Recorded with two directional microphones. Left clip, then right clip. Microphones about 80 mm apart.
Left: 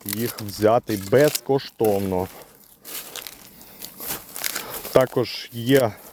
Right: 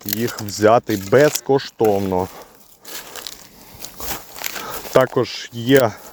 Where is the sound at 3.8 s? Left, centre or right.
Right.